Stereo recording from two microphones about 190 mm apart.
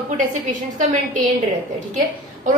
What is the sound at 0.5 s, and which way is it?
Speech, 40° right (ahead or behind).